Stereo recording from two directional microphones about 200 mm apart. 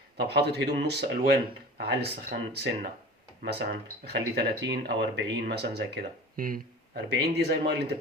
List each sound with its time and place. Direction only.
0.3 s speech: 55° right (ahead or behind)